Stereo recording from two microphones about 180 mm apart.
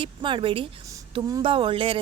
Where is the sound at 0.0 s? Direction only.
30° right (ahead or behind).